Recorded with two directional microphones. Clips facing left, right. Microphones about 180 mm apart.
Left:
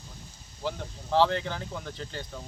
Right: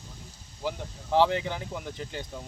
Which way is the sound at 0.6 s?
10° right (ahead or behind).